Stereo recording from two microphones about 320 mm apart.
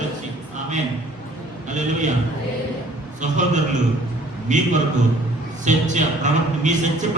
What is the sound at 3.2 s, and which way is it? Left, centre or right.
A man's voice, right.